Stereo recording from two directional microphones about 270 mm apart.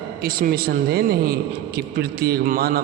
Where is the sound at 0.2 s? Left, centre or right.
Right.